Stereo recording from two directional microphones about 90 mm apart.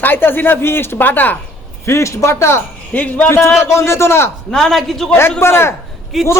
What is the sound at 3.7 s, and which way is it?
Speech, 30° left (ahead or behind).